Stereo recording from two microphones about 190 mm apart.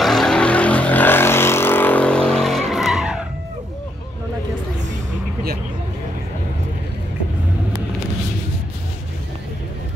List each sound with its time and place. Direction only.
0.0 s vehicle: centre (ahead or behind)